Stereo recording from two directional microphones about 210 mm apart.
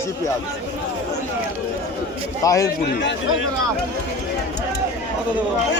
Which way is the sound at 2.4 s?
15° left (ahead or behind).